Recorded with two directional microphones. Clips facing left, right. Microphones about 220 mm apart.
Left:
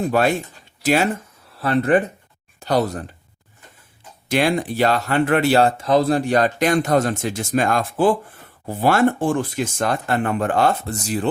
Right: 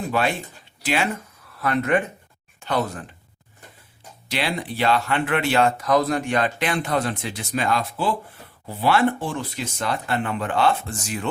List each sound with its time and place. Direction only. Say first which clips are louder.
0.1 s speech: left 5 dB; 45° left (ahead or behind)
4.3 s speech: left 8 dB; 50° left (ahead or behind)